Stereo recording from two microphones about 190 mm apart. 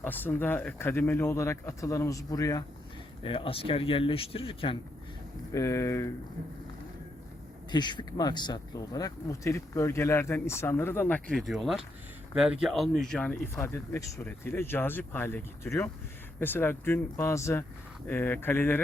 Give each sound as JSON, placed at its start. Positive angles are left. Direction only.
{"t": 0.0, "sound": "speech", "side_deg": 10}
{"t": 3.2, "sound": "speech", "side_deg": 30}
{"t": 5.5, "sound": "speech", "side_deg": 15}
{"t": 7.7, "sound": "speech", "side_deg": 25}